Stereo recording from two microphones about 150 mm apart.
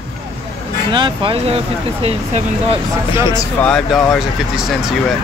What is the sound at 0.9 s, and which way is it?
Speech, 35° right (ahead or behind).